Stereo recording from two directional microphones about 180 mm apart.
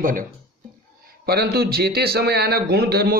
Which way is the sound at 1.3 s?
60° right (ahead or behind).